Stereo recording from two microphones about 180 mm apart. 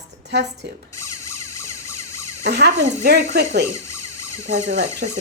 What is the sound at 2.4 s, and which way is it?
A woman's voice, 65° right (ahead or behind).